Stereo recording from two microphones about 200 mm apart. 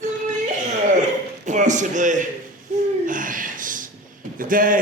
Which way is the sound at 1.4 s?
35° right (ahead or behind).